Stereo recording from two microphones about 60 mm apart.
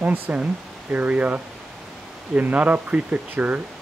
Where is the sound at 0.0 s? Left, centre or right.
Right.